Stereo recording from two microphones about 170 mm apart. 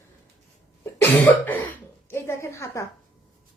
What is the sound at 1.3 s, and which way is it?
Cough, 10° left (ahead or behind).